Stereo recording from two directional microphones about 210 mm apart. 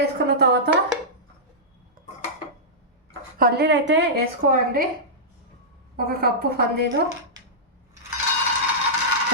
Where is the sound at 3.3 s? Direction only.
45° right (ahead or behind).